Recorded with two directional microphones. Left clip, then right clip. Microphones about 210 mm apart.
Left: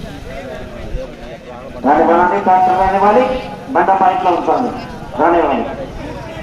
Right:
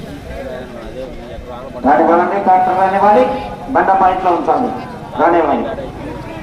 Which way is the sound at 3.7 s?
30° right (ahead or behind).